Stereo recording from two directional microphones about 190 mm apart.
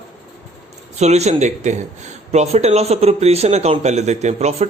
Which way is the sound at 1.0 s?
35° right (ahead or behind).